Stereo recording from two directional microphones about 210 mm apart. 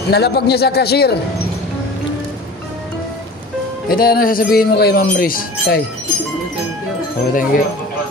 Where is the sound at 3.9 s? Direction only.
45° left (ahead or behind).